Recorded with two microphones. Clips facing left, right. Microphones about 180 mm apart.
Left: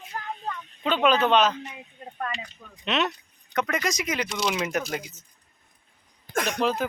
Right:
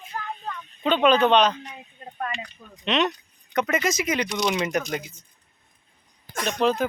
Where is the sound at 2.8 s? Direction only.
5° left (ahead or behind).